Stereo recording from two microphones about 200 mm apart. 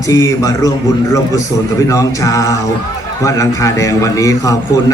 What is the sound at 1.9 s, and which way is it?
A man's voice, 15° left (ahead or behind).